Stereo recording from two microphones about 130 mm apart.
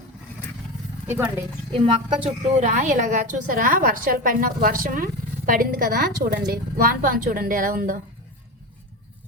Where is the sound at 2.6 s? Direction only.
70° right (ahead or behind); by 8.0 s 90° right.